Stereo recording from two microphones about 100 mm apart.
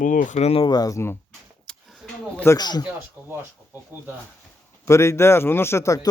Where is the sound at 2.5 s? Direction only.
45° left (ahead or behind).